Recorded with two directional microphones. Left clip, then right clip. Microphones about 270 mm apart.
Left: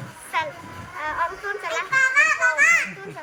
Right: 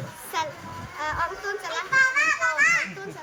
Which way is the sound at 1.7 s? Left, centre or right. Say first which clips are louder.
Left 1 dB; left.